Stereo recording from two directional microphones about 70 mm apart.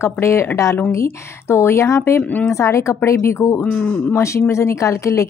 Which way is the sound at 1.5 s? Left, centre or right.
Left.